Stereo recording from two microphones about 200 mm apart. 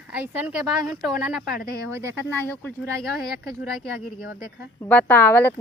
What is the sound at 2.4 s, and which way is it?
Speech, 5° left (ahead or behind).